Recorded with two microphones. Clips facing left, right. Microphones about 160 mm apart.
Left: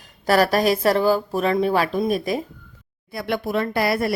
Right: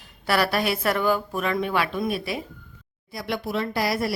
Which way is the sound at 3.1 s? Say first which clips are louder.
Left 4 dB; 55° left (ahead or behind).